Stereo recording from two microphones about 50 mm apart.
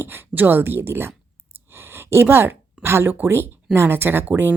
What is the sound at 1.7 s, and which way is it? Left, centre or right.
Gasp, right.